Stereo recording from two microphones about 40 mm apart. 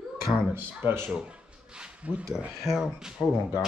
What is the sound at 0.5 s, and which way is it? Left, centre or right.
Speech, right.